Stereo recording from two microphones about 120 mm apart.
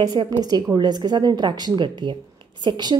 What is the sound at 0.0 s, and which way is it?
A woman's voice, 35° right (ahead or behind).